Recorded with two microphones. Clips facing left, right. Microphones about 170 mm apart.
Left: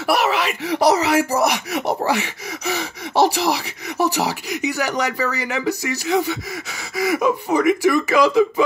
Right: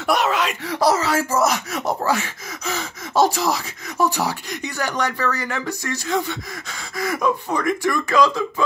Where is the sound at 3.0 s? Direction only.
70° left (ahead or behind).